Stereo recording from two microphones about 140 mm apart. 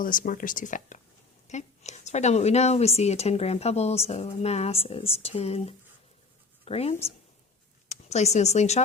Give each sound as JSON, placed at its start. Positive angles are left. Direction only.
{"t": 0.0, "sound": "speech", "side_deg": 75}